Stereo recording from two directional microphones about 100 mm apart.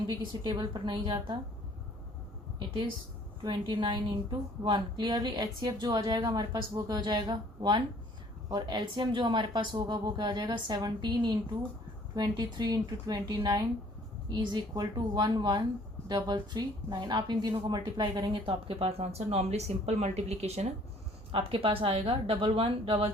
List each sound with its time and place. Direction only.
0.1 s a woman's voice: 45° right (ahead or behind)
3.4 s a woman's voice: 50° right (ahead or behind)
7.0 s a woman's voice: 50° right (ahead or behind)
18.7 s speech: 85° right
21.3 s speech: 65° right (ahead or behind)